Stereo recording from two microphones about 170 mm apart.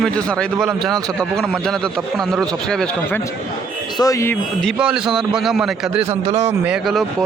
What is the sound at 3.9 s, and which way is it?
Speech, 20° left (ahead or behind).